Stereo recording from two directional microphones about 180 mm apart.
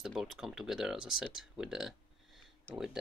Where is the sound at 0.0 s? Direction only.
Centre (ahead or behind).